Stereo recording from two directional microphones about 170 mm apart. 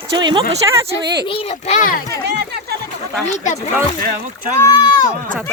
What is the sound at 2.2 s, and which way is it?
Speech, 75° right (ahead or behind).